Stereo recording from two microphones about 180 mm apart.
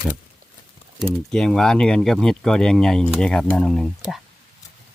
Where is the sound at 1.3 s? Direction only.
5° left (ahead or behind).